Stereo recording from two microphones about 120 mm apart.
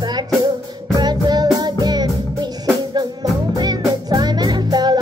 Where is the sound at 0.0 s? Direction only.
35° right (ahead or behind).